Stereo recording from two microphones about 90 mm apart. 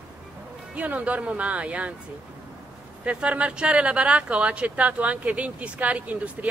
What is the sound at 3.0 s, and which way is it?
Speech, 15° right (ahead or behind).